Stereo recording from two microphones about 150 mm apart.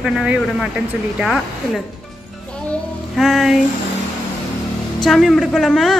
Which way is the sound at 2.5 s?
5° left (ahead or behind).